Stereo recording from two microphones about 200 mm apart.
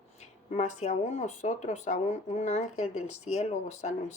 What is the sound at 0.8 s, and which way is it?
Speech, 35° left (ahead or behind).